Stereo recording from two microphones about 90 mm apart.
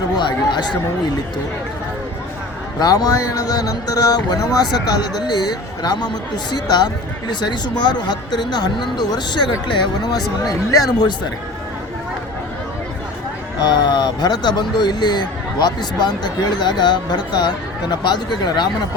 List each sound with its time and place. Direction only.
0.2 s speech: 55° left (ahead or behind)
2.7 s speech: 45° left (ahead or behind)
13.6 s speech: 55° left (ahead or behind)